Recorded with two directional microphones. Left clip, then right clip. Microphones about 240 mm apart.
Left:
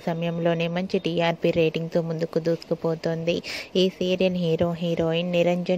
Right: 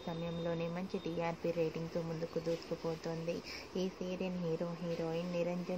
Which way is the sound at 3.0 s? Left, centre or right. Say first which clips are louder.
Left 15 dB; left.